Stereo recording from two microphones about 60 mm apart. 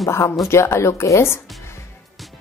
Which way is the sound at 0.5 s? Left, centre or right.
Left.